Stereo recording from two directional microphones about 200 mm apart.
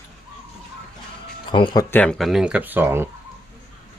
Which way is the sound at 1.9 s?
5° left (ahead or behind).